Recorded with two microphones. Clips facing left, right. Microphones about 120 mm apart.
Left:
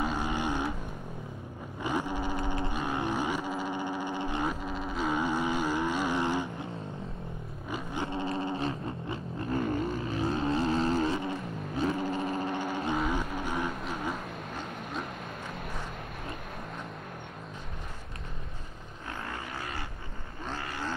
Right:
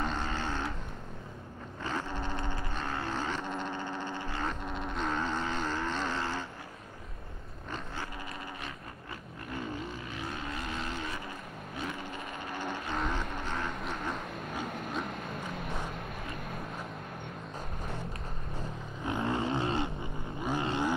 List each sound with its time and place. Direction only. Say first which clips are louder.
0.0 s vehicle: left 3 dB; 10° left (ahead or behind)
1.8 s a sound: left 4 dB; 15° left (ahead or behind)
4.6 s vehicle: left 3 dB; 5° left (ahead or behind)
7.7 s dog: left 6 dB; 20° left (ahead or behind)
9.5 s vehicle: left 8 dB; 50° left (ahead or behind)
10.2 s boat: left 11 dB; 30° left (ahead or behind)
11.8 s vehicle: left 10 dB; 35° left (ahead or behind)
12.9 s vehicle: left 2 dB; 5° left (ahead or behind)
19.0 s vehicle: right 8 dB; 20° right (ahead or behind)
20.4 s a sound: right 6 dB; 20° right (ahead or behind)